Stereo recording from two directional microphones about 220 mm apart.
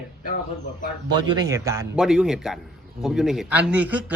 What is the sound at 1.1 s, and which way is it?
Speech, 20° right (ahead or behind).